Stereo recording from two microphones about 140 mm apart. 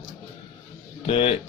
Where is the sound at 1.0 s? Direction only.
40° left (ahead or behind).